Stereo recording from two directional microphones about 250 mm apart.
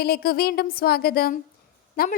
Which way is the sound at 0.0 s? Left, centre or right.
Left.